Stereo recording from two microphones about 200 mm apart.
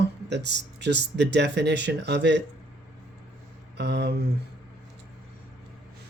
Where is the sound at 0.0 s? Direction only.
60° right (ahead or behind).